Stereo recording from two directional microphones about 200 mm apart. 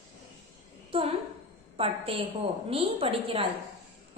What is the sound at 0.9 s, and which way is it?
A woman's voice, 25° right (ahead or behind).